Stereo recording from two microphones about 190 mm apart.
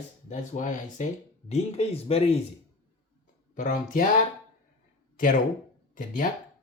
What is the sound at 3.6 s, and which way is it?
Speech, 45° left (ahead or behind).